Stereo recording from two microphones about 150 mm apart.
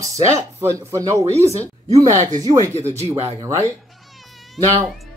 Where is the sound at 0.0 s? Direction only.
20° right (ahead or behind).